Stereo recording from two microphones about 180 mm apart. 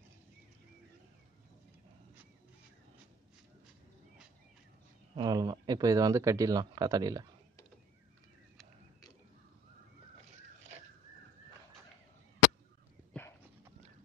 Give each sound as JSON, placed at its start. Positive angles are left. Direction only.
{"t": 5.1, "sound": "speech", "side_deg": -20}
{"t": 13.1, "sound": "horse", "side_deg": 5}